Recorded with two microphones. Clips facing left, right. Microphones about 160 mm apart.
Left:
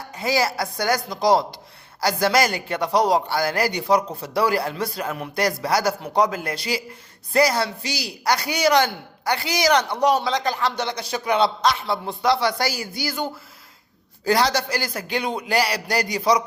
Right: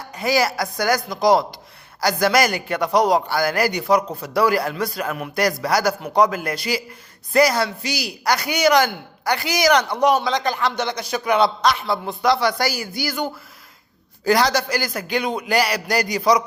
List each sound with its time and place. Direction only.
0.2 s a man's voice: 25° left (ahead or behind)